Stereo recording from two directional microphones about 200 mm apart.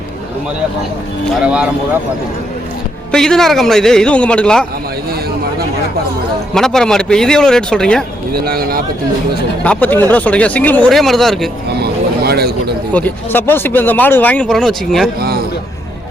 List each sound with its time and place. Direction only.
1.4 s a man's voice: 5° right (ahead or behind)
3.1 s a man's voice: 5° left (ahead or behind)
6.5 s a man's voice: 5° left (ahead or behind)
8.3 s speech: 50° right (ahead or behind)
9.6 s speech: 10° left (ahead or behind)
11.8 s a sound: 55° right (ahead or behind)
12.9 s speech: 10° left (ahead or behind)